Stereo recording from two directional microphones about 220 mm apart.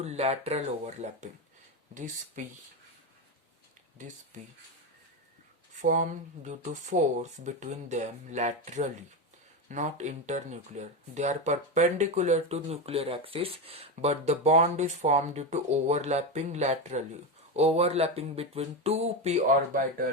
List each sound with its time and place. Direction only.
0.0 s speech: 30° right (ahead or behind)
2.4 s speech: 35° right (ahead or behind)
5.8 s speech: 35° right (ahead or behind)